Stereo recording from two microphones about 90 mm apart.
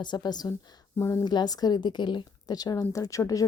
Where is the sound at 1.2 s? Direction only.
50° left (ahead or behind).